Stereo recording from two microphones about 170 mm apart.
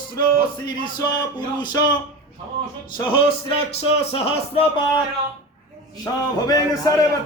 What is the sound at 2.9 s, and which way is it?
Music, 30° left (ahead or behind).